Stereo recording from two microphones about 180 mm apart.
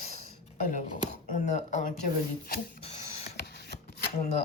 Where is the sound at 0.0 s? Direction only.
35° left (ahead or behind).